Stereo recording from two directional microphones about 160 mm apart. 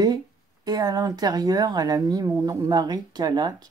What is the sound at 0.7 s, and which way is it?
Speech, 25° right (ahead or behind).